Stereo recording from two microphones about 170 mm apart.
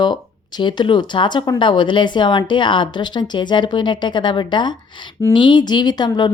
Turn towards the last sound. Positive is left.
turn(degrees=25)  # may be behind; listen again after turning